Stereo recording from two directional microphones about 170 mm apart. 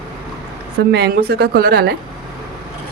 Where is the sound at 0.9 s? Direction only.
70° right (ahead or behind).